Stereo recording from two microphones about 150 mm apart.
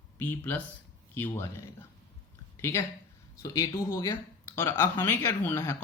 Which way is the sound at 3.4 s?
25° left (ahead or behind).